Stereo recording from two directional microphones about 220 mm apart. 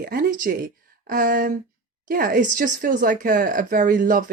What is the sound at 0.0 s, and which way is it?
Speech, 40° right (ahead or behind).